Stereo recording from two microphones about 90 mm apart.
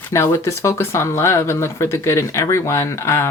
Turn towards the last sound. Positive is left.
turn(degrees=30)  # may be behind; listen again after turning